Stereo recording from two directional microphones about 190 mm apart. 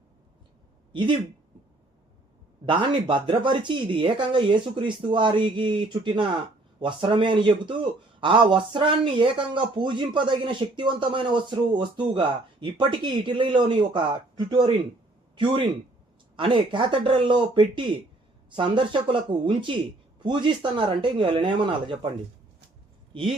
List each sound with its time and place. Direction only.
2.6 s speech: 25° right (ahead or behind)
16.3 s speech: 25° right (ahead or behind)